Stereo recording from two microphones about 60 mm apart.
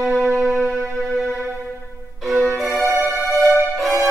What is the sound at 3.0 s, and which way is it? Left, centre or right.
Music, centre.